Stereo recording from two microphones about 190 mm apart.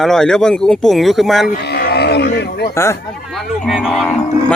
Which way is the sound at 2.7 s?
15° left (ahead or behind).